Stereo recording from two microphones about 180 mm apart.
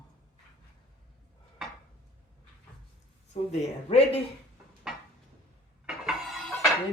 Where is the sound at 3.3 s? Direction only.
35° left (ahead or behind).